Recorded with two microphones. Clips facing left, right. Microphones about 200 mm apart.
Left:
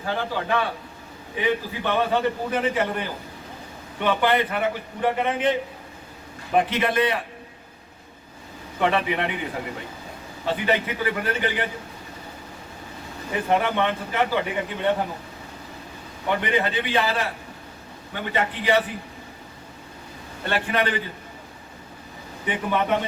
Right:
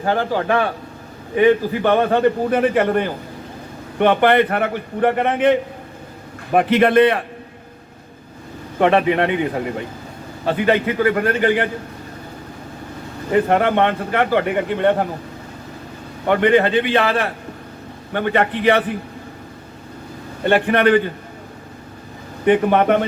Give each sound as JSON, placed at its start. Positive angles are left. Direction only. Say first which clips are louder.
{"t": 0.0, "sound": "speech", "louder": "right 8 dB", "side_deg": -55}
{"t": 8.8, "sound": "speech", "louder": "right 8 dB", "side_deg": -55}
{"t": 10.4, "sound": "speech", "louder": "right 7 dB", "side_deg": -55}
{"t": 13.3, "sound": "speech", "louder": "right 7 dB", "side_deg": -60}
{"t": 16.2, "sound": "speech", "louder": "right 9 dB", "side_deg": -55}
{"t": 20.5, "sound": "speech", "louder": "right 10 dB", "side_deg": -55}
{"t": 22.4, "sound": "speech", "louder": "right 10 dB", "side_deg": -55}